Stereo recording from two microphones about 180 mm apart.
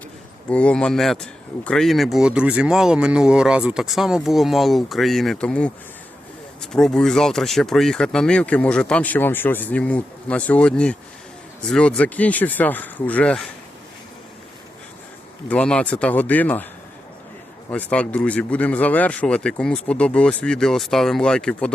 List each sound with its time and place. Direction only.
0.5 s speech: 5° left (ahead or behind)
15.4 s speech: 5° left (ahead or behind)
17.7 s speech: 10° left (ahead or behind)